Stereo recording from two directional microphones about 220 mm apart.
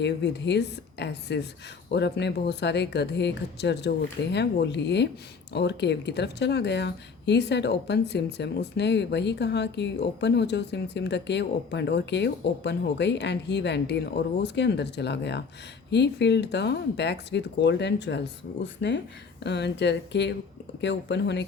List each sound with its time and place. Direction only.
0.0 s speech: 50° left (ahead or behind)